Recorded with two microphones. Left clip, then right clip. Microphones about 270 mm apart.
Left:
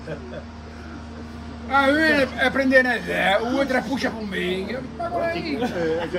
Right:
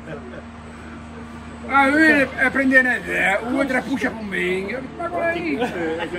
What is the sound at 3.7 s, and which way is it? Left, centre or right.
Speech, left.